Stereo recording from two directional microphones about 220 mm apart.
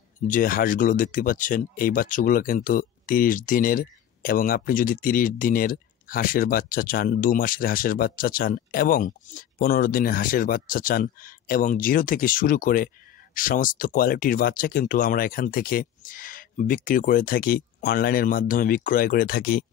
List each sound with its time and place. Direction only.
0.3 s speech: 40° left (ahead or behind)